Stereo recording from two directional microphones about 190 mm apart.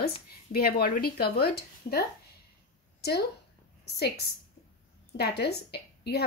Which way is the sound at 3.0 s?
55° left (ahead or behind).